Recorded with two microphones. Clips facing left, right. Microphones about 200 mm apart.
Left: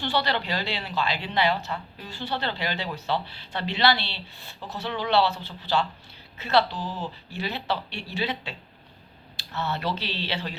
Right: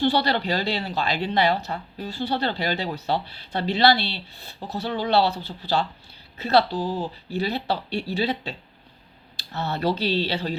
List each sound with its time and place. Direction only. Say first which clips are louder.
0.0 s speech: right 5 dB; 40° right (ahead or behind)